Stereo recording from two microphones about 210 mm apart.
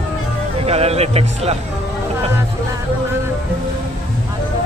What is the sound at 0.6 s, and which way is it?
Speech, 30° right (ahead or behind).